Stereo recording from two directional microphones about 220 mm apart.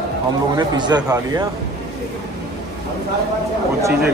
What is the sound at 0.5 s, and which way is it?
Speech, 20° right (ahead or behind).